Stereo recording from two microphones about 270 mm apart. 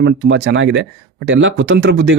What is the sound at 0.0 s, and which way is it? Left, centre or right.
Speech, right.